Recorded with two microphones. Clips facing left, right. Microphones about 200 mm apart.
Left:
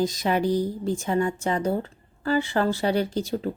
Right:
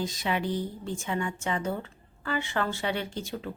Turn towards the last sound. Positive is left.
turn(degrees=35)  # may be behind; listen again after turning